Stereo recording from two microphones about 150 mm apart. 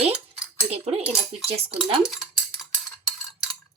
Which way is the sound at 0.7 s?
45° right (ahead or behind).